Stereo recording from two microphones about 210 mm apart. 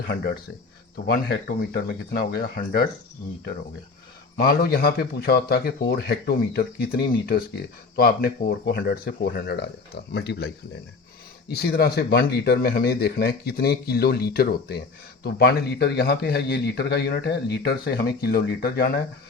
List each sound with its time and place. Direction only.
1.0 s a man's voice: 45° left (ahead or behind)
4.4 s a man's voice: 45° left (ahead or behind)